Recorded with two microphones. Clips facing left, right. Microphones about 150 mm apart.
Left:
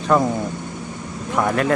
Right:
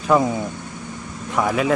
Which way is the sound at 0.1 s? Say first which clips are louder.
Even; centre (ahead or behind).